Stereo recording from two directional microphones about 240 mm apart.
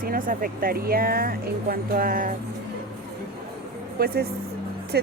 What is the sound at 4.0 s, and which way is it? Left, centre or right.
Speech, right.